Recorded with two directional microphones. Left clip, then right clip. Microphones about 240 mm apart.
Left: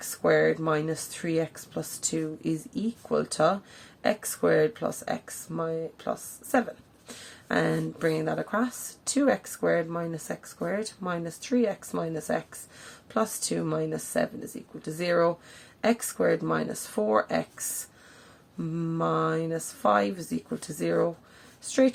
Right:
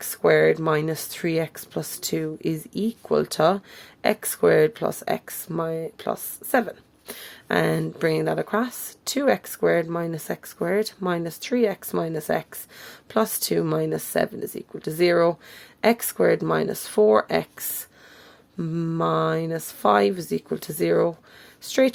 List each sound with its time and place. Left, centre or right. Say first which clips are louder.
0.0 s speech: right 5 dB; right
18.7 s speech: right 4 dB; right